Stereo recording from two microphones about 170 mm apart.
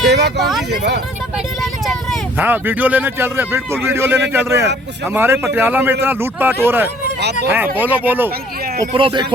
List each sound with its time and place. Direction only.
0.1 s a sound: 80° right
1.6 s vehicle: centre (ahead or behind)
2.4 s speech: 10° right (ahead or behind)
8.9 s speech: 30° right (ahead or behind)